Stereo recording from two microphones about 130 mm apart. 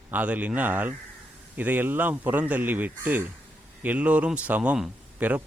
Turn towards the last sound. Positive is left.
turn(degrees=-10)  # may be behind; listen again after turning